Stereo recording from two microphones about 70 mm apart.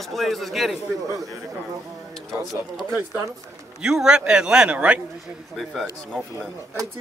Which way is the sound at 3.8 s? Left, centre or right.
Centre.